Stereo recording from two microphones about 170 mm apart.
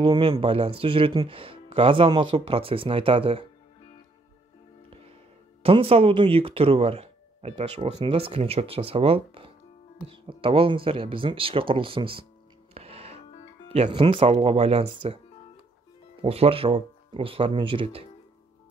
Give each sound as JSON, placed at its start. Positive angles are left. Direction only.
{"t": 0.0, "sound": "speech", "side_deg": -30}
{"t": 5.6, "sound": "speech", "side_deg": -35}
{"t": 12.7, "sound": "music", "side_deg": -35}
{"t": 13.7, "sound": "speech", "side_deg": -40}
{"t": 16.2, "sound": "speech", "side_deg": -35}